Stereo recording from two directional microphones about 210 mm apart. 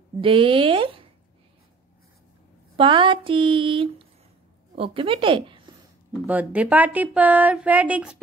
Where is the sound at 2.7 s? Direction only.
25° right (ahead or behind).